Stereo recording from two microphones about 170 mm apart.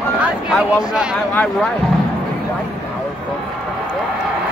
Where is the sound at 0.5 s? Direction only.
5° right (ahead or behind).